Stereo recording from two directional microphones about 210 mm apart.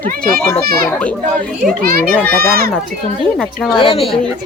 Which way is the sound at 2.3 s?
45° right (ahead or behind).